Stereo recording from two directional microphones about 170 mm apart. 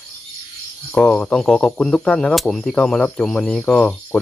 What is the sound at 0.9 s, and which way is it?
Speech, 5° left (ahead or behind).